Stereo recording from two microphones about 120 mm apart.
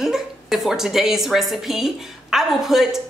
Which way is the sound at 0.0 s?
Centre (ahead or behind).